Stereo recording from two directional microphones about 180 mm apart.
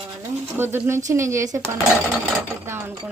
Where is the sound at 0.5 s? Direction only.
10° right (ahead or behind).